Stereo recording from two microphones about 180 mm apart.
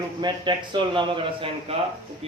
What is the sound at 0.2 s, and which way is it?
A man's voice, 25° right (ahead or behind).